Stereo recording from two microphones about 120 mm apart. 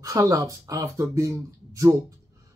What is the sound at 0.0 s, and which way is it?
Speech, 30° right (ahead or behind).